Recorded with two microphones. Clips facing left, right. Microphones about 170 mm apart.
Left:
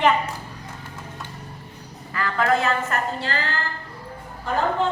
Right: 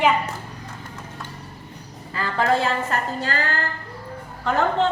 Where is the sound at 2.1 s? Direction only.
30° right (ahead or behind).